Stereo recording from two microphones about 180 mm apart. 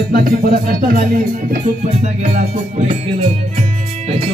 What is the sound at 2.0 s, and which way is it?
Music, 40° right (ahead or behind).